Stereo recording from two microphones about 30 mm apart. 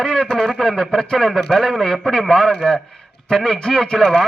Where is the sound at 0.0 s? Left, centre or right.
Left.